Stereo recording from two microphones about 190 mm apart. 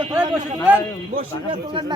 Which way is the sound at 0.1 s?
5° right (ahead or behind).